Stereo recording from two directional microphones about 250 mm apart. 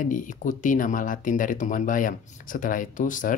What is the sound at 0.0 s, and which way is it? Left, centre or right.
Speech, left.